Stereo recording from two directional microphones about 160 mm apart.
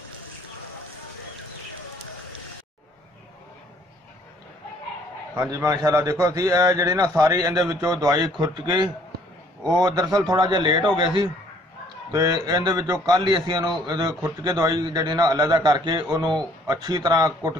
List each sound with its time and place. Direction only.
5.4 s a man's voice: 20° right (ahead or behind)
12.1 s a man's voice: 25° right (ahead or behind)